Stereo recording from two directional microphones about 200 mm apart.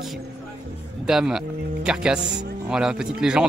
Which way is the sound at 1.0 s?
5° right (ahead or behind).